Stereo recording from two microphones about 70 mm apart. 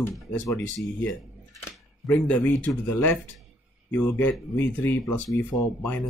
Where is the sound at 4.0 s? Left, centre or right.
Centre.